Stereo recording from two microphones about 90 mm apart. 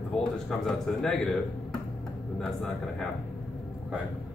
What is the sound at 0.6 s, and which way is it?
Speech, 5° left (ahead or behind).